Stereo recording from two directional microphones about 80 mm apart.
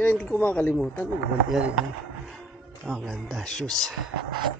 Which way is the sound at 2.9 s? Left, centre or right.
Centre.